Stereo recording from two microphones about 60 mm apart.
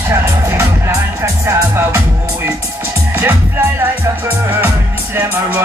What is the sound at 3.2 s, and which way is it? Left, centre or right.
Speech, right.